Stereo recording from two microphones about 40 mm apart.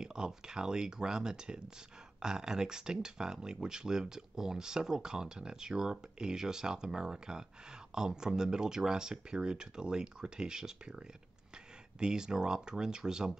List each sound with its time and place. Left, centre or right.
0.0 s speech: centre